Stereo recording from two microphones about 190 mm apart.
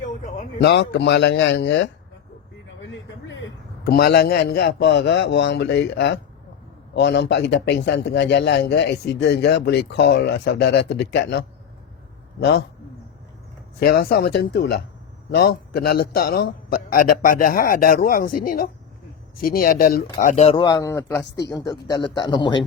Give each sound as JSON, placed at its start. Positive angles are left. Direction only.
{"t": 0.0, "sound": "a sound", "side_deg": 40}
{"t": 0.6, "sound": "a man's voice", "side_deg": 60}
{"t": 13.7, "sound": "a man's voice", "side_deg": 55}
{"t": 20.7, "sound": "speech", "side_deg": 15}